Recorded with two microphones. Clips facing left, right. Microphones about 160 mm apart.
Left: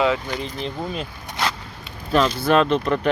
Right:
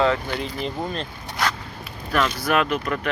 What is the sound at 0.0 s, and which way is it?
Speech, 15° left (ahead or behind).